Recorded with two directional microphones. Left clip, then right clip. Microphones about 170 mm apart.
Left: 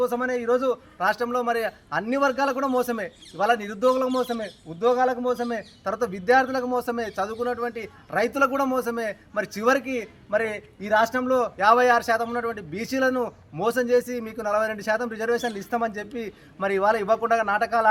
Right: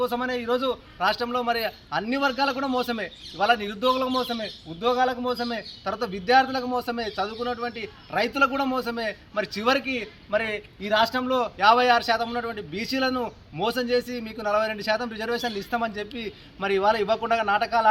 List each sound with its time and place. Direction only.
0.5 s a man's voice: 15° left (ahead or behind)
5.9 s a man's voice: 15° left (ahead or behind)
8.4 s a man's voice: 5° left (ahead or behind)
8.7 s a man's voice: 15° left (ahead or behind)
10.0 s a man's voice: 5° left (ahead or behind)
13.6 s a man's voice: 20° left (ahead or behind)
14.4 s a man's voice: 5° left (ahead or behind)
14.8 s a man's voice: 20° left (ahead or behind)
15.4 s a man's voice: centre (ahead or behind)
16.1 s a man's voice: 15° left (ahead or behind)